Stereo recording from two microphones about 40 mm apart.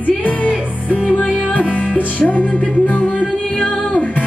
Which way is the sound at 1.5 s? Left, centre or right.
Left.